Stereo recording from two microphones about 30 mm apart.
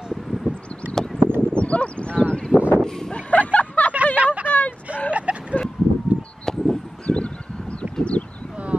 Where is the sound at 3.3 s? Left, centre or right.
Left.